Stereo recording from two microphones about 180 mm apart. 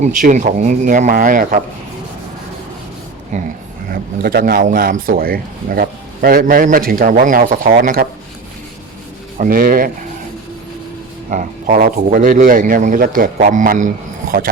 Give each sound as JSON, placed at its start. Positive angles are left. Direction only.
{"t": 0.0, "sound": "speech", "side_deg": -45}
{"t": 3.3, "sound": "speech", "side_deg": -45}
{"t": 3.9, "sound": "speech", "side_deg": -55}
{"t": 9.4, "sound": "speech", "side_deg": -50}
{"t": 11.3, "sound": "speech", "side_deg": -45}